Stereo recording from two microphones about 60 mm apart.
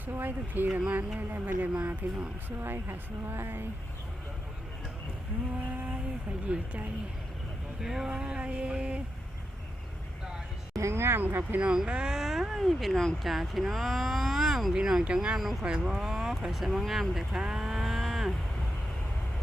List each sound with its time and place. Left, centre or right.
0.0 s speech: right
0.7 s speech: right
5.6 s vehicle: right
7.8 s speech: centre
8.1 s speech: centre
10.8 s speech: right
11.2 s speech: right
11.6 s speech: centre
17.4 s moo: centre